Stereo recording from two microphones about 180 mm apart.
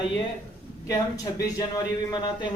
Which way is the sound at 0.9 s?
20° left (ahead or behind).